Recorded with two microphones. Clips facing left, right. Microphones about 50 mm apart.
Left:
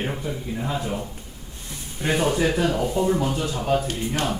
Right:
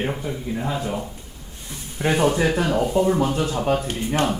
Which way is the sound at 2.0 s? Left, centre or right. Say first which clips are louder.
Right 2 dB; right.